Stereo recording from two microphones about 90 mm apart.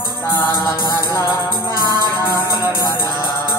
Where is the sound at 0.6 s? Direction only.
40° left (ahead or behind).